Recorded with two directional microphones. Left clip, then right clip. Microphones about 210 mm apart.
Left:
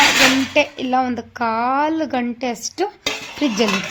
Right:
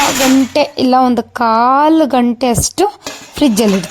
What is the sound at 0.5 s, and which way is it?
Speech, 45° right (ahead or behind).